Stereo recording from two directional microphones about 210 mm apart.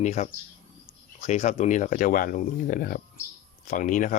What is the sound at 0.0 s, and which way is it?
Speech, 35° left (ahead or behind).